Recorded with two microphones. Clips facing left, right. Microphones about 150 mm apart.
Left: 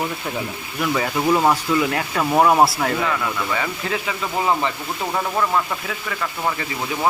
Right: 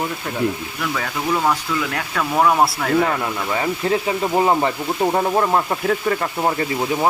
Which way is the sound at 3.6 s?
35° right (ahead or behind).